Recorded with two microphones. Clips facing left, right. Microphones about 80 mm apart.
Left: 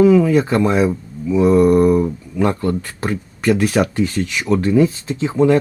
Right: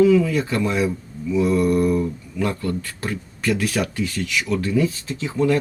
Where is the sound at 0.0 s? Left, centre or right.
Left.